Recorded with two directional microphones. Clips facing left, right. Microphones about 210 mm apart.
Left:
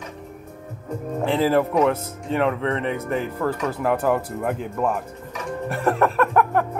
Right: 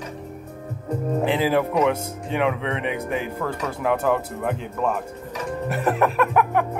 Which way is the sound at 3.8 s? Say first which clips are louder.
Even; centre (ahead or behind).